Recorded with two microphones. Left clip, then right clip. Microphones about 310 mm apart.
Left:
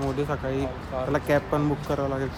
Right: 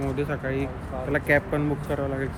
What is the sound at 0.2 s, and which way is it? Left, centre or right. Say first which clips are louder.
Speech: even; centre.